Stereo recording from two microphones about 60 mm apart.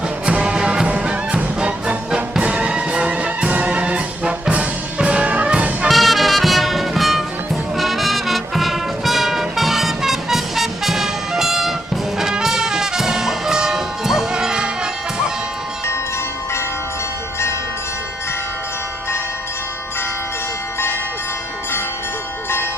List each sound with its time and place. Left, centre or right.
0.3 s music: centre
5.9 s music: centre